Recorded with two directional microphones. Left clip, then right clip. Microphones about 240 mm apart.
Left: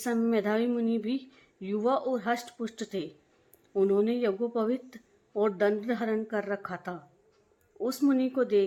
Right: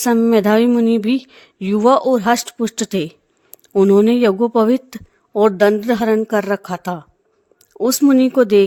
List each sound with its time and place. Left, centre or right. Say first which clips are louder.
0.0 s speech: right 14 dB; right